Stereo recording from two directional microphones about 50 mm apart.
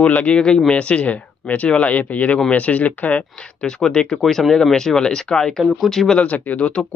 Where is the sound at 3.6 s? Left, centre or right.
Centre.